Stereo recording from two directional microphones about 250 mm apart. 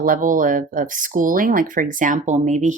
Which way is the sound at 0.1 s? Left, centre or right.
Right.